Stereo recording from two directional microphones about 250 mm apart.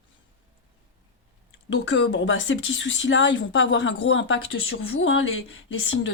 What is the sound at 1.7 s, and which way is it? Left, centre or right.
Speech, left.